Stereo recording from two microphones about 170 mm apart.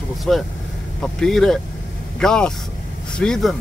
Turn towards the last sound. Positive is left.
turn(degrees=0)  # may be behind; listen again after turning